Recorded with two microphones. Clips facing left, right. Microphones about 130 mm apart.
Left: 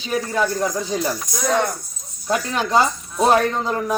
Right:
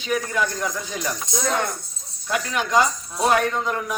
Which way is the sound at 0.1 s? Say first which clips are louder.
Left 3 dB; 35° left (ahead or behind).